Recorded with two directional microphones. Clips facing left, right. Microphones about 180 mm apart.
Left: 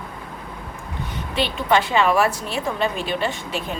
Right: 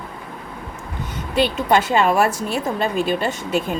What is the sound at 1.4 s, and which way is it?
A woman's voice, 45° right (ahead or behind).